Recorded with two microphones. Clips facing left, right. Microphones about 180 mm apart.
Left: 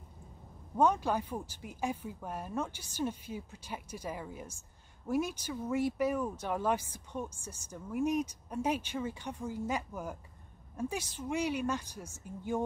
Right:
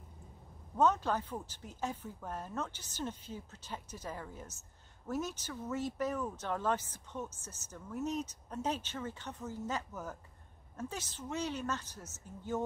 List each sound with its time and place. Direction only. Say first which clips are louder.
0.7 s a woman's voice: left 2 dB; 10° left (ahead or behind)